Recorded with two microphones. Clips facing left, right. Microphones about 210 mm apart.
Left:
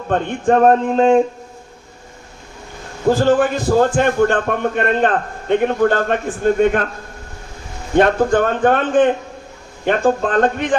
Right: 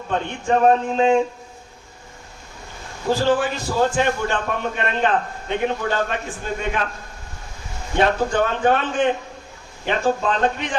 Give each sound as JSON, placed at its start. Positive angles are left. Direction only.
{"t": 0.1, "sound": "a man's voice", "side_deg": 50}
{"t": 3.1, "sound": "a man's voice", "side_deg": 50}
{"t": 7.9, "sound": "a man's voice", "side_deg": 50}